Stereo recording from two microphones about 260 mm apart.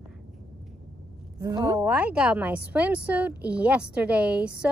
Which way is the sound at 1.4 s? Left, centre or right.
Centre.